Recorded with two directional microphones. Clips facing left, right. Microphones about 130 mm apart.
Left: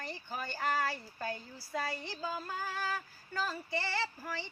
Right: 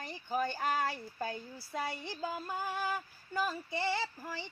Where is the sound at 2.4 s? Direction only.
20° right (ahead or behind).